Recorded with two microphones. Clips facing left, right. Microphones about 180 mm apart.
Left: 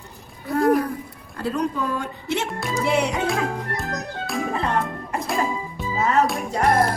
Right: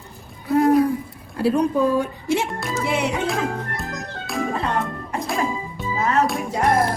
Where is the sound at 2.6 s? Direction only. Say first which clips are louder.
Left 1 dB; centre (ahead or behind).